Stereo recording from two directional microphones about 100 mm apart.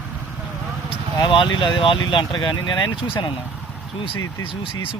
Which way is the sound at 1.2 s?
55° left (ahead or behind).